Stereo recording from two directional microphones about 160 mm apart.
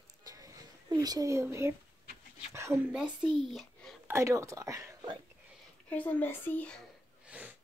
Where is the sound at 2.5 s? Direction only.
15° right (ahead or behind).